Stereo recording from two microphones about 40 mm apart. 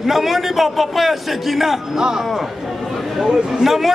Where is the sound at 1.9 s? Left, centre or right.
Centre.